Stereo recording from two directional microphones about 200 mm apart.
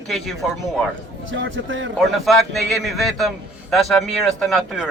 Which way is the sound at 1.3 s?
70° right (ahead or behind).